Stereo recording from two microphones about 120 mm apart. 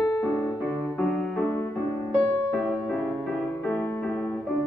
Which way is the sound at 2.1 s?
5° left (ahead or behind).